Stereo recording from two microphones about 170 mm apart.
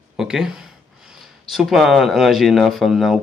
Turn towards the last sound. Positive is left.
turn(degrees=0)  # may be behind; listen again after turning